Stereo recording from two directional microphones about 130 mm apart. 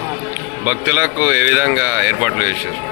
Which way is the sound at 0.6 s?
15° right (ahead or behind).